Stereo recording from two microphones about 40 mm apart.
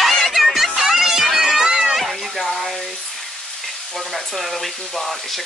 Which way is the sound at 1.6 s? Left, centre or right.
Centre.